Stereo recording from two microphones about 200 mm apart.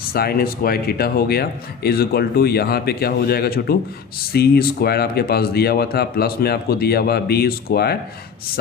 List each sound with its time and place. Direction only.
0.1 s speech: 50° left (ahead or behind)